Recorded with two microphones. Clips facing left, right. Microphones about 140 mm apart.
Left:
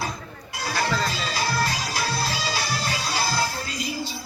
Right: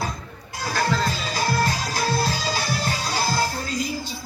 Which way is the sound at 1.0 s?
45° right (ahead or behind).